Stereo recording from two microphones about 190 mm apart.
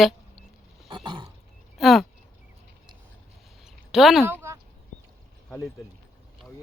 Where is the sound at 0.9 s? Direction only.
25° right (ahead or behind).